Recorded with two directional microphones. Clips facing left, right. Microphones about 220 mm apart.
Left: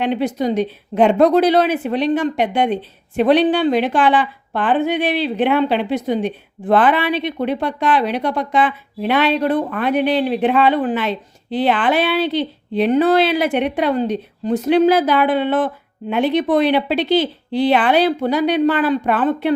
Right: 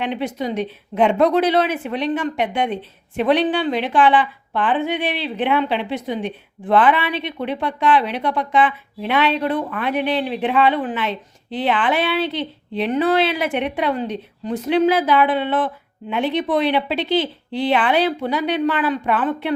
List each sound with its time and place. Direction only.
0.0 s a woman's voice: 40° left (ahead or behind)